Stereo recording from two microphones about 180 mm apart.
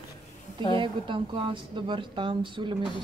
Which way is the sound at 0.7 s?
25° right (ahead or behind).